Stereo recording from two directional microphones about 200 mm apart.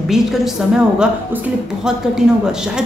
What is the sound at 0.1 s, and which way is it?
A woman's voice, centre (ahead or behind).